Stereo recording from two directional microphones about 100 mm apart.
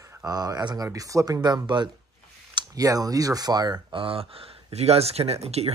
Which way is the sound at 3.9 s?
65° right (ahead or behind).